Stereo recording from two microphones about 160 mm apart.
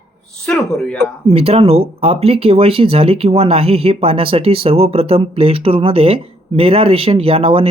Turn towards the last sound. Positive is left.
turn(degrees=-35)  # may be behind; listen again after turning